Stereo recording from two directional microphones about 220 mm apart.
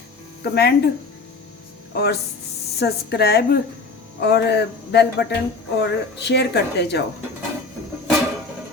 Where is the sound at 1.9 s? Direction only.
45° left (ahead or behind).